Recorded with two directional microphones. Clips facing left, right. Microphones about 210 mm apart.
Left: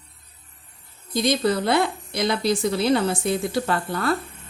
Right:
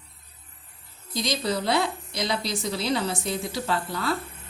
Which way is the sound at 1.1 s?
55° left (ahead or behind).